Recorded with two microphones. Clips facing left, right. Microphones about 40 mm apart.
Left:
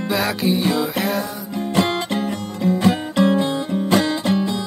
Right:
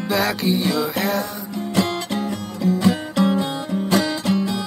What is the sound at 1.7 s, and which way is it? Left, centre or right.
Music, left.